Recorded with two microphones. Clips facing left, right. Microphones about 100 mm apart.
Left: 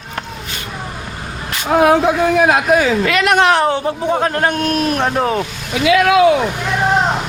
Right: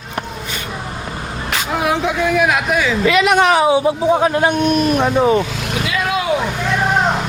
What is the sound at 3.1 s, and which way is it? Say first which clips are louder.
A man's voice: right 3 dB; centre (ahead or behind).